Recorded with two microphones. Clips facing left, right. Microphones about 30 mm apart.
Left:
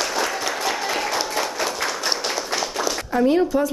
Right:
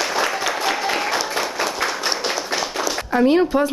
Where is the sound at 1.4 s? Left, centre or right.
Centre.